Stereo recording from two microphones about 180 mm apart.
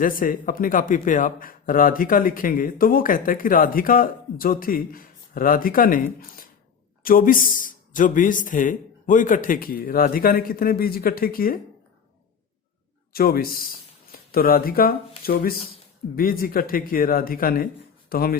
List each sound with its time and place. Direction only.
0.0 s speech: 50° left (ahead or behind)
13.1 s speech: 55° left (ahead or behind)